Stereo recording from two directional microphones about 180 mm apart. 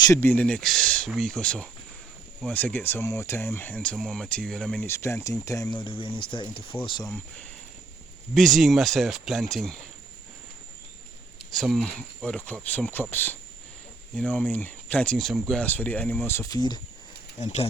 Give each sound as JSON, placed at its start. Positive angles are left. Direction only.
{"t": 0.1, "sound": "speech", "side_deg": 10}
{"t": 8.4, "sound": "speech", "side_deg": 0}
{"t": 11.5, "sound": "speech", "side_deg": 0}
{"t": 17.3, "sound": "speech", "side_deg": 40}